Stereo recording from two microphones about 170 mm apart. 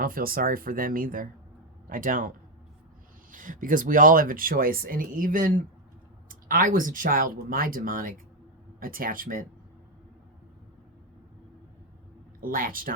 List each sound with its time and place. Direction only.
0.0 s speech: 55° right (ahead or behind)
3.3 s speech: 50° right (ahead or behind)
12.4 s speech: 55° right (ahead or behind)